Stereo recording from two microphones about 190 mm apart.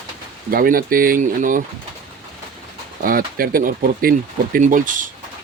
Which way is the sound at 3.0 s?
50° right (ahead or behind).